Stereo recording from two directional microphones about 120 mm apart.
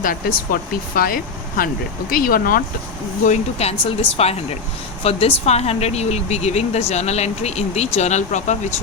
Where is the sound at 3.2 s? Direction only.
65° left (ahead or behind).